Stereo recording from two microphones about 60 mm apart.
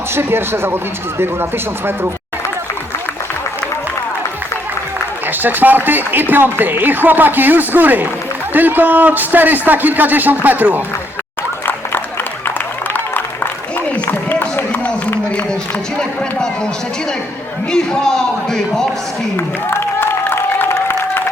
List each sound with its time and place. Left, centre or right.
0.1 s speech: right
5.4 s speech: right
12.9 s a sound: left
17.7 s speech: centre
20.0 s applause: left